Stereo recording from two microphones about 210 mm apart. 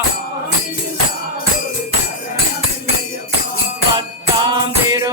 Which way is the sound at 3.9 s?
20° right (ahead or behind).